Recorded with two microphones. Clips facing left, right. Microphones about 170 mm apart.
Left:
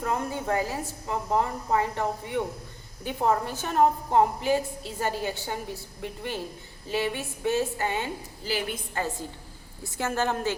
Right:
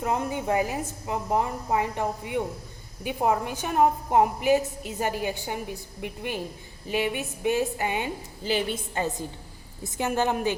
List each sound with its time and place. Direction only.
0.0 s a woman's voice: 20° right (ahead or behind)